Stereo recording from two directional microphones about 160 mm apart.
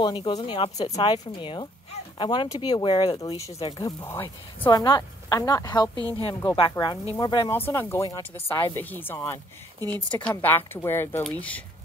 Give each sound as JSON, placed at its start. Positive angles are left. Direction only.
{"t": 0.0, "sound": "speech", "side_deg": 30}
{"t": 1.0, "sound": "speech", "side_deg": 25}
{"t": 4.6, "sound": "speech", "side_deg": 25}
{"t": 5.9, "sound": "a woman's voice", "side_deg": -25}
{"t": 6.8, "sound": "speech", "side_deg": 30}
{"t": 7.5, "sound": "speech", "side_deg": 15}
{"t": 9.8, "sound": "speech", "side_deg": -25}
{"t": 10.1, "sound": "speech", "side_deg": 10}